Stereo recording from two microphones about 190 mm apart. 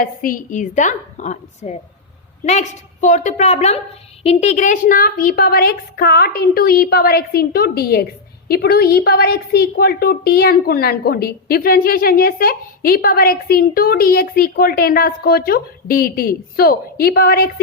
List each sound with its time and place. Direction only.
0.0 s a woman's voice: 50° left (ahead or behind)